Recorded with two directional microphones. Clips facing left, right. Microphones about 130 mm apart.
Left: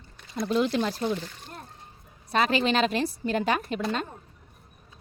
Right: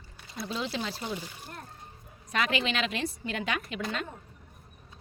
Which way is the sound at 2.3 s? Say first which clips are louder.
Left 6 dB; 35° left (ahead or behind).